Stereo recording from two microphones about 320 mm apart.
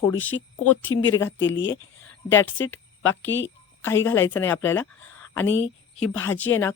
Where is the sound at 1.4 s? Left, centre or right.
Left.